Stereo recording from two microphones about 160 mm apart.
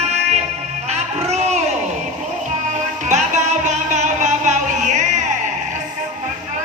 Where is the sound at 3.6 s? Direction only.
50° right (ahead or behind).